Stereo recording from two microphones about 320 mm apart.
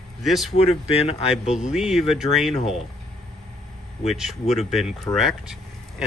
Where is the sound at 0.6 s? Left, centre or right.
Centre.